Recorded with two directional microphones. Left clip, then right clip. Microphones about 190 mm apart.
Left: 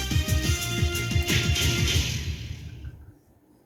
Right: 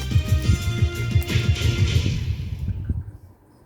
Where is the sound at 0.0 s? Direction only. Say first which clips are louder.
Left 1 dB; 50° left (ahead or behind).